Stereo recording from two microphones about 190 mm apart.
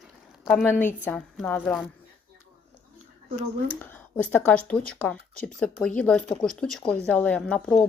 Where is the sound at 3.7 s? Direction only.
10° left (ahead or behind).